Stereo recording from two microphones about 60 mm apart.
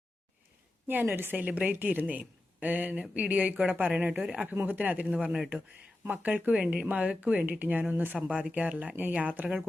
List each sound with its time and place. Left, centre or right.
0.9 s a woman's voice: right
4.1 s speech: centre
4.6 s a woman's voice: right
6.5 s a woman's voice: centre
8.3 s a woman's voice: centre